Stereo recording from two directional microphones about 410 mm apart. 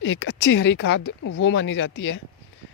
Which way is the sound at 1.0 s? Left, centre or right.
Left.